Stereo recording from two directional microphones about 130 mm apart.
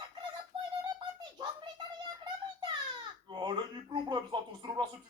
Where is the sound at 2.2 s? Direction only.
35° right (ahead or behind).